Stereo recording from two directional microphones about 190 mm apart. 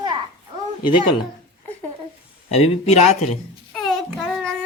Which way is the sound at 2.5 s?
35° left (ahead or behind).